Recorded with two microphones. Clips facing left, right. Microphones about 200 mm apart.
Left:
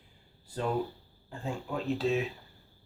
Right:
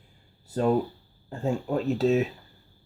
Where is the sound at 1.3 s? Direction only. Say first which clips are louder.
Right 9 dB; 40° right (ahead or behind).